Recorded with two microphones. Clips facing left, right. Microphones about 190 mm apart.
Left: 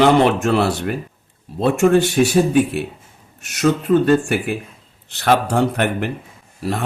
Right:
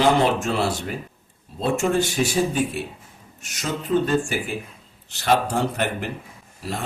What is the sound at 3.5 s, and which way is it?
Speech, 65° left (ahead or behind).